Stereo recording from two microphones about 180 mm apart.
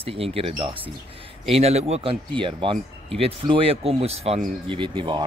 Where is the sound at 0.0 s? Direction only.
30° right (ahead or behind).